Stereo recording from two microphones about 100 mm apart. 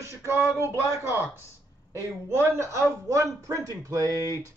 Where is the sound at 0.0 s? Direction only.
25° right (ahead or behind).